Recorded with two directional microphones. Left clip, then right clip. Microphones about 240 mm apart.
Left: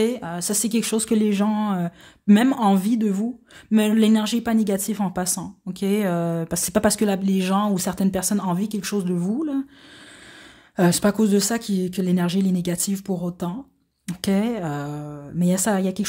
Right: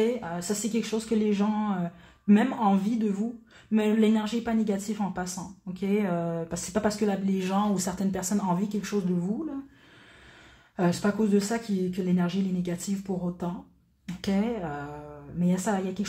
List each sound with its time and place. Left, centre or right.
0.0 s a woman's voice: left
10.8 s a woman's voice: left